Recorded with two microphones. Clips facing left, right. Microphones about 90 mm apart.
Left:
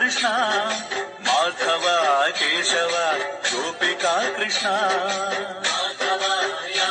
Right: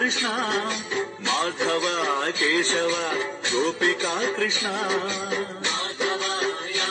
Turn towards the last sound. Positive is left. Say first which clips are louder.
# left 3 dB
turn(degrees=45)  # may be behind; listen again after turning